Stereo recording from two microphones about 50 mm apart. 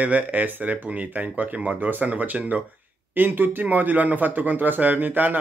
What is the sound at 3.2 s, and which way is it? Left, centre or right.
A man's voice, right.